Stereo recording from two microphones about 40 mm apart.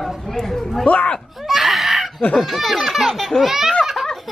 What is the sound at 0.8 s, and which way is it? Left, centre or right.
Speech, left.